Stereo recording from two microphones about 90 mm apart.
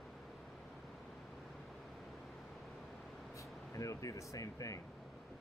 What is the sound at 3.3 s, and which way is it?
Air conditioning, 35° left (ahead or behind).